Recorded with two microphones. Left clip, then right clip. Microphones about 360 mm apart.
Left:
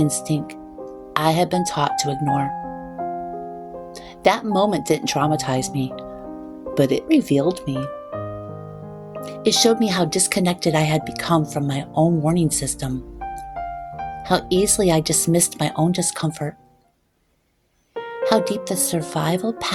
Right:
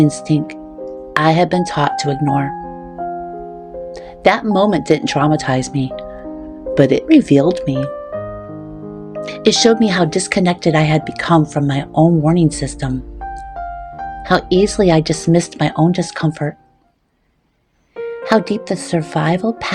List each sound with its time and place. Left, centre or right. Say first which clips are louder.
0.0 s speech: right 7 dB; left
4.2 s speech: right 5 dB; left
9.2 s speech: right 5 dB; left
14.3 s speech: right 6 dB; left
18.2 s speech: right 3 dB; left